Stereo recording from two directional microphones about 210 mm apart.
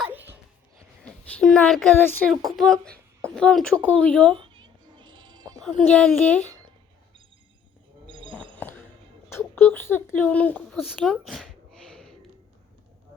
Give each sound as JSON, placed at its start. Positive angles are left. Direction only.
{"t": 0.0, "sound": "music", "side_deg": -10}
{"t": 1.0, "sound": "a woman's voice", "side_deg": 5}
{"t": 4.6, "sound": "music", "side_deg": -20}
{"t": 5.6, "sound": "speech", "side_deg": 5}
{"t": 8.0, "sound": "a sound", "side_deg": -25}
{"t": 8.3, "sound": "a sound", "side_deg": 5}
{"t": 9.6, "sound": "speech", "side_deg": 10}